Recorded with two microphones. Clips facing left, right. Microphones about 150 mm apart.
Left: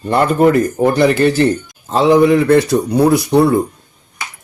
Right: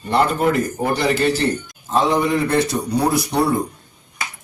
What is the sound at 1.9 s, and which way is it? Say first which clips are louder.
Speech: left 8 dB; 65° left (ahead or behind).